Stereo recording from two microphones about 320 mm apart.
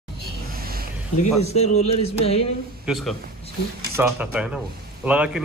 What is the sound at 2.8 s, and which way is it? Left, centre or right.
A man's voice, centre.